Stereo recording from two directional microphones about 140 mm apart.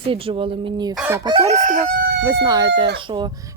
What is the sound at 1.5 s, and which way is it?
Crowing, 65° right (ahead or behind).